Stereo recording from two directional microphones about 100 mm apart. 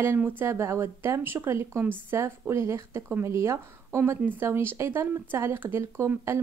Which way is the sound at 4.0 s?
15° right (ahead or behind).